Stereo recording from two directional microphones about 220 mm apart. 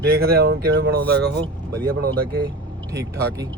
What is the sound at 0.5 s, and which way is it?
Speech, 50° right (ahead or behind).